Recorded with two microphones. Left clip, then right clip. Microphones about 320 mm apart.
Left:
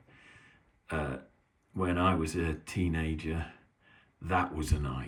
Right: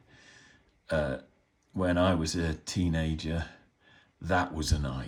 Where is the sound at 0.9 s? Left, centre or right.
Centre.